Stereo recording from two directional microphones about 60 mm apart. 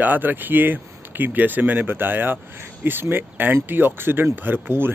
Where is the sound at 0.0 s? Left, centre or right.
Right.